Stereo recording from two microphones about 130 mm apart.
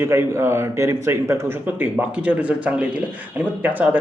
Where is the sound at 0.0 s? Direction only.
20° right (ahead or behind).